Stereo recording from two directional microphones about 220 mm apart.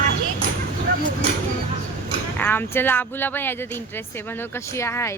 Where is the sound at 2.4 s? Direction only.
10° left (ahead or behind).